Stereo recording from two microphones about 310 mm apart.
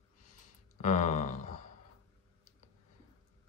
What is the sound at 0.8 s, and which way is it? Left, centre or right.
Speech, left.